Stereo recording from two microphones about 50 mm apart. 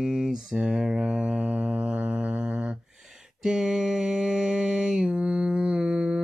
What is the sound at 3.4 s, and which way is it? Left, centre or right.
Mantra, centre.